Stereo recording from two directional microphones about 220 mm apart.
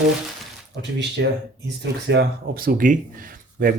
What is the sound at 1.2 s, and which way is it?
Speech, 50° right (ahead or behind).